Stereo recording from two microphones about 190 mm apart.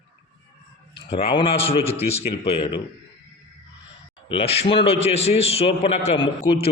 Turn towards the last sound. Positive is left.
turn(degrees=25)  # may be behind; listen again after turning